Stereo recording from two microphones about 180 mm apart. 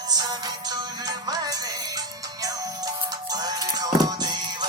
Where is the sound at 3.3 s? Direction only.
20° right (ahead or behind).